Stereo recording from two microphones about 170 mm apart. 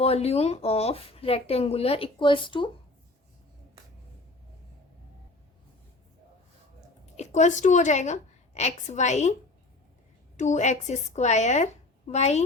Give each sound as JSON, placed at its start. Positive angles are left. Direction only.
{"t": 0.0, "sound": "speech", "side_deg": 35}
{"t": 7.0, "sound": "a woman's voice", "side_deg": 45}
{"t": 10.3, "sound": "a woman's voice", "side_deg": 45}